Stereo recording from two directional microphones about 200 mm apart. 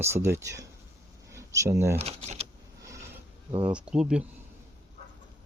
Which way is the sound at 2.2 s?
30° right (ahead or behind).